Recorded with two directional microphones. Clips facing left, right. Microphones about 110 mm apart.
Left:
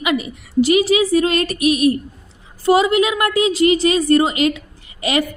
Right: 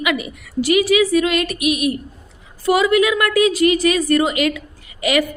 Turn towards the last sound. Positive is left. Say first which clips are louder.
# right 1 dB
turn(degrees=30)  # may be behind; listen again after turning